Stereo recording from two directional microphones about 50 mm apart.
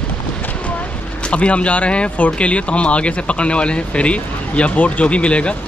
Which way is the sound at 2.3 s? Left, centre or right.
Left.